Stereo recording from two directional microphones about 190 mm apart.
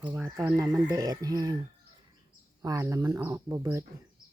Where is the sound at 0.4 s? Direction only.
15° right (ahead or behind).